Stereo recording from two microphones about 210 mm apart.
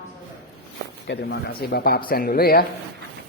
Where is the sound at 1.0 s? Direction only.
50° left (ahead or behind).